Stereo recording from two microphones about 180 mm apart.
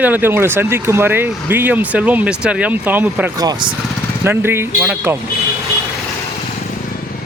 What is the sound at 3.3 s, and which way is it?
Speech, 20° right (ahead or behind).